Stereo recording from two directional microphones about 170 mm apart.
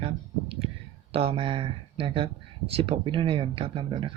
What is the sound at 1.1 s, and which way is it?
Speech, 35° right (ahead or behind).